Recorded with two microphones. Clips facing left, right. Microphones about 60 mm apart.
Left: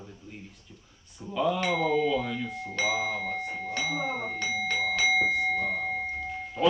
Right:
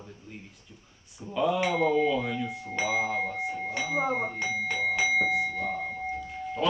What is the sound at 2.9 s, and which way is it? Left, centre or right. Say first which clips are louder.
Doorbell: right 2 dB; right.